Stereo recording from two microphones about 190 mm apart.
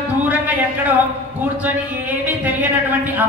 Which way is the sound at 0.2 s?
10° right (ahead or behind).